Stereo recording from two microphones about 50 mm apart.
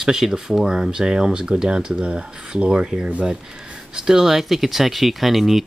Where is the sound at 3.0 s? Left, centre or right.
Right.